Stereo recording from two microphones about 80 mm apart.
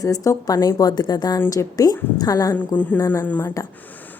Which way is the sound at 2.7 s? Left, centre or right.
Left.